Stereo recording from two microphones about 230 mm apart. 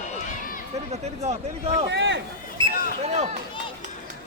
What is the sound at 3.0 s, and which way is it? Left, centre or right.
Speech, right.